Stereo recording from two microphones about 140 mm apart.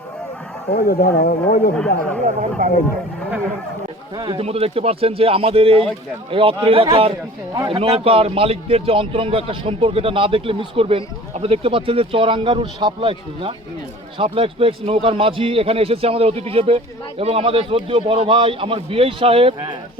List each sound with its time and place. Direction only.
0.8 s speech: 90° left
1.7 s speech: 5° left (ahead or behind)
2.2 s speech: 65° right (ahead or behind)
4.2 s a man's voice: 40° right (ahead or behind)